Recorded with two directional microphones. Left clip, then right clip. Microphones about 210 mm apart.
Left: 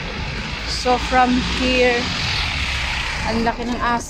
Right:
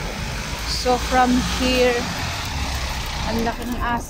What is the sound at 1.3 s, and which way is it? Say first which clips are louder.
Speech: left 1 dB; 55° right (ahead or behind).